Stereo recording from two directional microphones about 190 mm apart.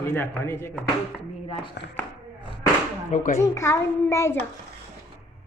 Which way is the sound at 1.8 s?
65° left (ahead or behind).